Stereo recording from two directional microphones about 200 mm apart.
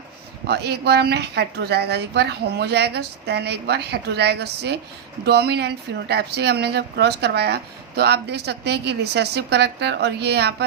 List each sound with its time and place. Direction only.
0.4 s speech: 55° right (ahead or behind)